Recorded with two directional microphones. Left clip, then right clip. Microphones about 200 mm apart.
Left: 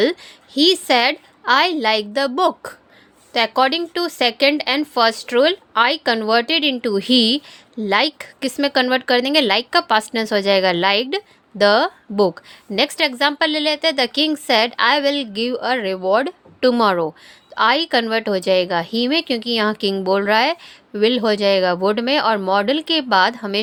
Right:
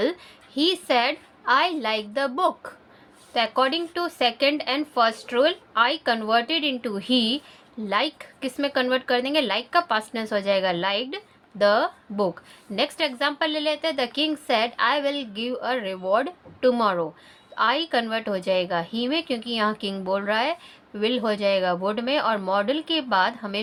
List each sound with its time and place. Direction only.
0.0 s a woman's voice: 40° left (ahead or behind)